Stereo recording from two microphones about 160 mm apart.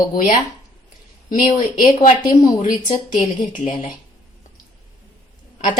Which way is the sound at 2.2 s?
25° left (ahead or behind).